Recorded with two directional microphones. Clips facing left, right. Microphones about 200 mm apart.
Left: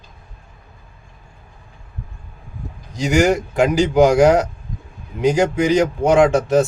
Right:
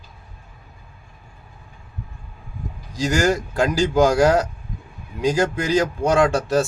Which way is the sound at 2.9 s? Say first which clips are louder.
Left 4 dB; 20° left (ahead or behind).